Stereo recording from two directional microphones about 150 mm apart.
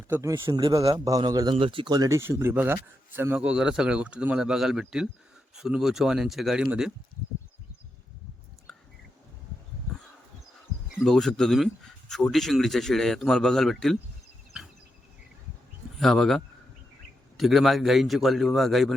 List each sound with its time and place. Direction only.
0.1 s a man's voice: 20° right (ahead or behind)
11.0 s speech: centre (ahead or behind)
16.0 s speech: centre (ahead or behind)